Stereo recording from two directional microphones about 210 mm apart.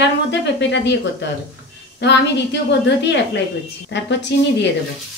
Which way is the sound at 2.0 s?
55° left (ahead or behind).